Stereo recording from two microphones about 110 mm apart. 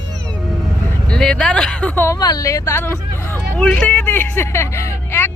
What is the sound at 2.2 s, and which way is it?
Speech, 35° left (ahead or behind).